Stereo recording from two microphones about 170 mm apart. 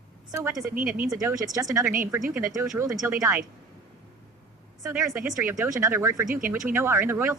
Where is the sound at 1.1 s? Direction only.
20° right (ahead or behind).